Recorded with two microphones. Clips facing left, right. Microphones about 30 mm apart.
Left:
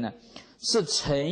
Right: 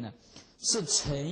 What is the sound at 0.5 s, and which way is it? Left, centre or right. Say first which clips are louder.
Speech: left 6 dB; left.